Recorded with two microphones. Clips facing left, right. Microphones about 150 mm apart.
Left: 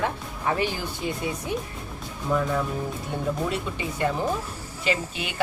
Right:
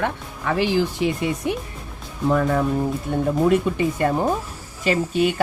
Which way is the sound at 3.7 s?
50° right (ahead or behind).